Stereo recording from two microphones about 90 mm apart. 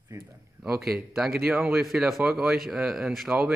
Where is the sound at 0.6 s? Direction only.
Centre (ahead or behind).